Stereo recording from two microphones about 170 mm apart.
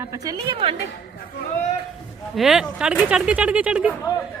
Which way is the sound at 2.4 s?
5° right (ahead or behind).